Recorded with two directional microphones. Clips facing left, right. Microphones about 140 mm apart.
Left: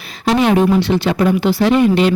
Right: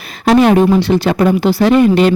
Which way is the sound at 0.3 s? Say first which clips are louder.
Right 4 dB; 45° right (ahead or behind).